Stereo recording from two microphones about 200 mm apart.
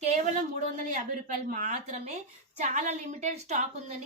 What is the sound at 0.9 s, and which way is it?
A woman's voice, 40° right (ahead or behind).